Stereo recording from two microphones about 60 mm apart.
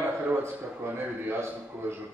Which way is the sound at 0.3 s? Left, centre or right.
Right.